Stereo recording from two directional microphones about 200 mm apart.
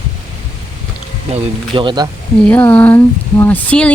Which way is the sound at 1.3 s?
25° right (ahead or behind).